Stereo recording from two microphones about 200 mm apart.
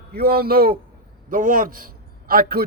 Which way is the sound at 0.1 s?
50° right (ahead or behind).